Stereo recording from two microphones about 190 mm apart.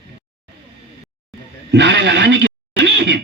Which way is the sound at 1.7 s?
65° right (ahead or behind).